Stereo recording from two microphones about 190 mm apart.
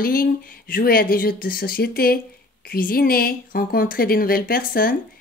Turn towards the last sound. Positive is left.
turn(degrees=50)  # may be behind; listen again after turning